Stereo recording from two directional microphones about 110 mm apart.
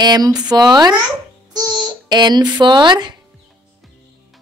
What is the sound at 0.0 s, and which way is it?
A child's voice, 35° right (ahead or behind).